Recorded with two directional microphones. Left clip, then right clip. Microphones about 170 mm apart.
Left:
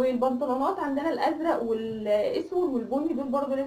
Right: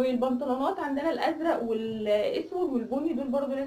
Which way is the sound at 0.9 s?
25° left (ahead or behind).